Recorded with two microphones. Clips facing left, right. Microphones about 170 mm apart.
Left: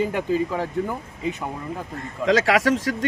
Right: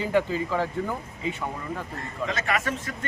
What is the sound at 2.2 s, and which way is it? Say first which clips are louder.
Speech: left 10 dB; 90° left.